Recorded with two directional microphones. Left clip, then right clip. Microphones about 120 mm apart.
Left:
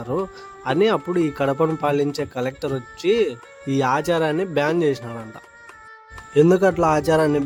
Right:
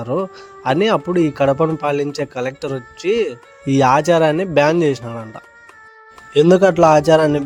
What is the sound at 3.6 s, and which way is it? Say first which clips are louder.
A man's voice: right 7 dB; 50° right (ahead or behind).